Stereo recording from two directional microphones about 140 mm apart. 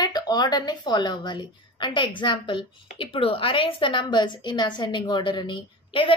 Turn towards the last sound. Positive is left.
turn(degrees=35)  # may be behind; listen again after turning